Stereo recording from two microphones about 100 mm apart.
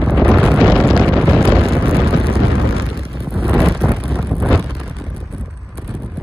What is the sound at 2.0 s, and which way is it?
Vehicle, 65° right (ahead or behind).